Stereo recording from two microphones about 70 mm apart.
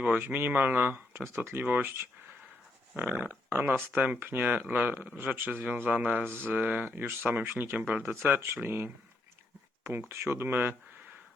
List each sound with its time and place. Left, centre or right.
0.3 s speech: right
2.9 s dog: right
3.2 s speech: right
8.0 s speech: right
10.1 s speech: right